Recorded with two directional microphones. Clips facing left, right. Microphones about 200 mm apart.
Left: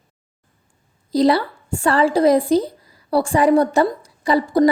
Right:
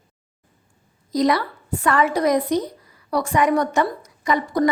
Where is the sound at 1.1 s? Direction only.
30° left (ahead or behind).